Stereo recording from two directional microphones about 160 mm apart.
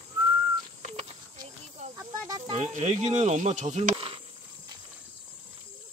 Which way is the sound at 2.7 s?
45° right (ahead or behind).